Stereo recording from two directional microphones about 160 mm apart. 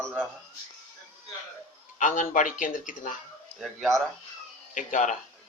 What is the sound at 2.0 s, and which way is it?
Speech, 55° left (ahead or behind).